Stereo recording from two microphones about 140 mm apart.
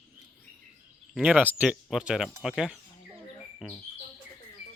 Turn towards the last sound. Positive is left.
turn(degrees=-5)  # may be behind; listen again after turning